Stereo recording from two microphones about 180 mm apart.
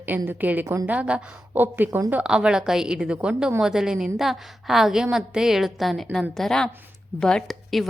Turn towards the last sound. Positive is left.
turn(degrees=0)  # may be behind; listen again after turning